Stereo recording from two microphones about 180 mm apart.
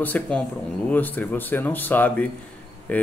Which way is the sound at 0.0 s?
10° left (ahead or behind).